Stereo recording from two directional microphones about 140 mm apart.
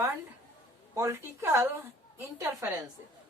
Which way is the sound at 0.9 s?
20° right (ahead or behind).